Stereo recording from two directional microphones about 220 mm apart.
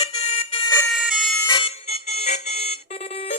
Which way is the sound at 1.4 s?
20° left (ahead or behind).